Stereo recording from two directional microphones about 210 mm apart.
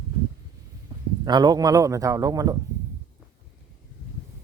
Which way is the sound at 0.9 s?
20° right (ahead or behind).